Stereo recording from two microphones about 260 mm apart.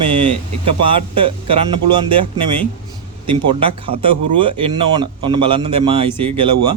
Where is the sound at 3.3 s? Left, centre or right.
Centre.